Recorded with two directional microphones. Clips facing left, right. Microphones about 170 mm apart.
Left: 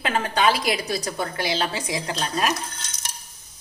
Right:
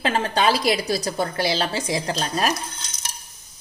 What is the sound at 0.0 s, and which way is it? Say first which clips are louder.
A woman's voice: right 1 dB; 35° right (ahead or behind).